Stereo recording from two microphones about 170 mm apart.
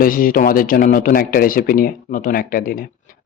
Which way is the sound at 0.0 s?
55° left (ahead or behind).